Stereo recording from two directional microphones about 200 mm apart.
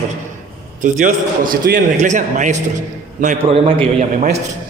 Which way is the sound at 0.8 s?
40° right (ahead or behind).